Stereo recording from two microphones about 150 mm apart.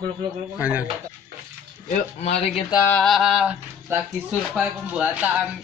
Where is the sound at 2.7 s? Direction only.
15° left (ahead or behind).